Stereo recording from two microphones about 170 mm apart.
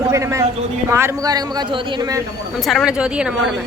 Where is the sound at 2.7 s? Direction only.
Centre (ahead or behind).